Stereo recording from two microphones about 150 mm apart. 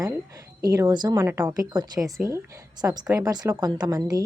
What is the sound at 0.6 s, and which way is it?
Speech, 25° right (ahead or behind).